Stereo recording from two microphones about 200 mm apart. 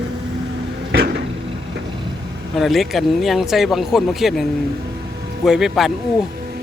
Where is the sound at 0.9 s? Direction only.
55° right (ahead or behind).